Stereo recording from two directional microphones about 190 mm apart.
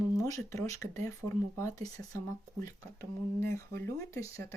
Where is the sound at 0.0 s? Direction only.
15° left (ahead or behind).